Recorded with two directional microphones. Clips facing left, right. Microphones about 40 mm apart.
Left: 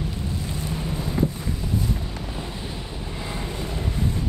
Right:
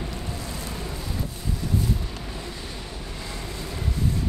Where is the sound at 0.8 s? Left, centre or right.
Left.